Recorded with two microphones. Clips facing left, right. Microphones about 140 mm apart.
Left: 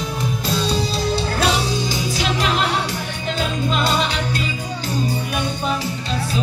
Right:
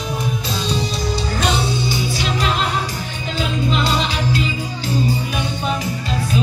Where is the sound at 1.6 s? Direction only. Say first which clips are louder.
Right 1 dB; 90° left.